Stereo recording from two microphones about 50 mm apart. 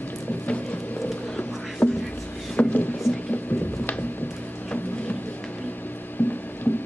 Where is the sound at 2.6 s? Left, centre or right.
Left.